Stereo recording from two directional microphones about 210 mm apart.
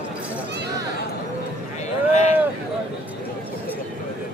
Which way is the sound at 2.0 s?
35° left (ahead or behind).